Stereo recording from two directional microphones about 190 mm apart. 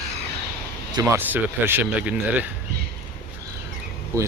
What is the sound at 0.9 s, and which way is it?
A man's voice, 20° right (ahead or behind).